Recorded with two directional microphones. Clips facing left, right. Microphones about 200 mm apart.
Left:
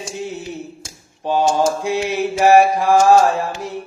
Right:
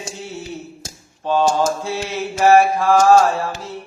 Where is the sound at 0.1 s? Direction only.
15° left (ahead or behind).